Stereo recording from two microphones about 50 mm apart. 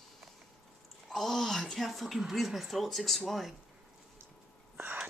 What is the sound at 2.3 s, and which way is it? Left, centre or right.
Speech, centre.